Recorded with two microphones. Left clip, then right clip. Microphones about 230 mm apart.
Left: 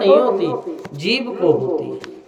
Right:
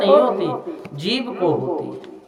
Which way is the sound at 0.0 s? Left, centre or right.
Centre.